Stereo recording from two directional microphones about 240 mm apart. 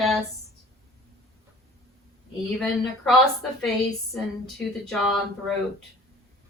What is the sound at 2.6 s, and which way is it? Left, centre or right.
Speech, centre.